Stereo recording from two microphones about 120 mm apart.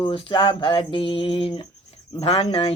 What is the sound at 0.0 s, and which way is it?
Speech, 45° left (ahead or behind).